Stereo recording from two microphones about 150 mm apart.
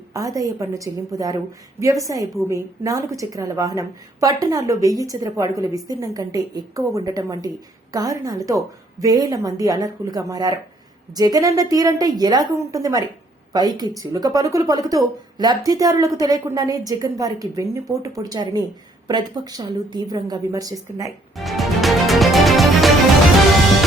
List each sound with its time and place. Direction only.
0.1 s speech: 25° right (ahead or behind)
21.3 s music: centre (ahead or behind)